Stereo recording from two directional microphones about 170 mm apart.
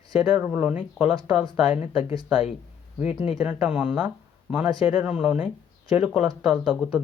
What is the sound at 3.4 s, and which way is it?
Speech, 5° right (ahead or behind).